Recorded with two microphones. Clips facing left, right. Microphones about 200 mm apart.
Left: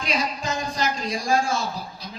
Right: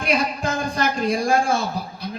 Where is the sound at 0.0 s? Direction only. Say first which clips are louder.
Right 5 dB; 55° right (ahead or behind).